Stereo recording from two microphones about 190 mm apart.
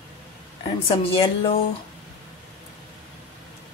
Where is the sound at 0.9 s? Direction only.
30° left (ahead or behind).